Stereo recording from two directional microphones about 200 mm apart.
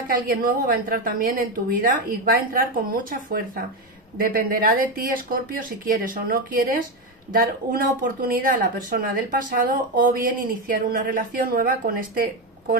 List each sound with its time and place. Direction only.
0.1 s speech: 45° right (ahead or behind)